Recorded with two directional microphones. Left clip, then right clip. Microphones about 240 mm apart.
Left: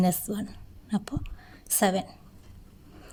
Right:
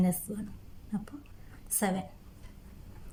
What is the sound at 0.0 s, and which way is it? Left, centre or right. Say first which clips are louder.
A woman's voice: left 6 dB; left.